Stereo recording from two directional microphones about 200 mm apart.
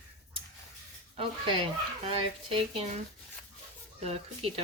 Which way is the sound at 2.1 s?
25° right (ahead or behind).